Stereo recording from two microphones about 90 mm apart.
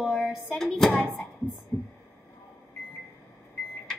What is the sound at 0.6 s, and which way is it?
Speech, 5° left (ahead or behind).